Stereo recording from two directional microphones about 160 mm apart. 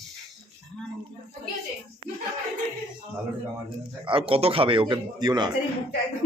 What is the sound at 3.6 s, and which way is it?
Speech, 35° right (ahead or behind).